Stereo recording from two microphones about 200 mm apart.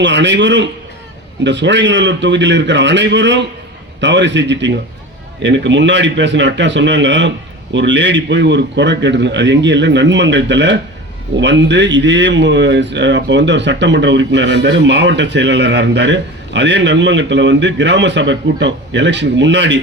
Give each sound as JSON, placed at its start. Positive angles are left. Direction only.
{"t": 0.0, "sound": "a man's voice", "side_deg": -60}